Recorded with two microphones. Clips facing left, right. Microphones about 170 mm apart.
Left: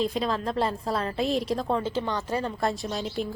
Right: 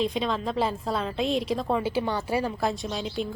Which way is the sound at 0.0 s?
Centre (ahead or behind).